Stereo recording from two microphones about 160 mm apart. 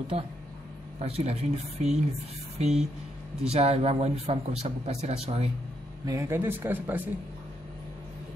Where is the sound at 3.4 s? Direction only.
40° right (ahead or behind).